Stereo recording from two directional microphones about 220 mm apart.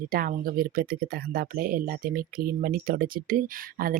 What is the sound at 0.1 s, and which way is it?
Speech, 40° right (ahead or behind).